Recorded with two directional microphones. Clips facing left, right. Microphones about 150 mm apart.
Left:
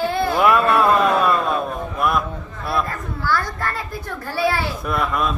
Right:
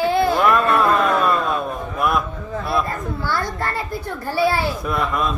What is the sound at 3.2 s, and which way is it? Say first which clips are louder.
Speech: left 2 dB; 15° right (ahead or behind).